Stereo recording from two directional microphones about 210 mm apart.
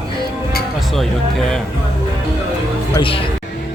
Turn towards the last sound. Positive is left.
turn(degrees=25)  # may be behind; listen again after turning